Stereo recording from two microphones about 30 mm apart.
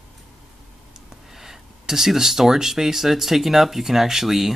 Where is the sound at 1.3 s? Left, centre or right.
Centre.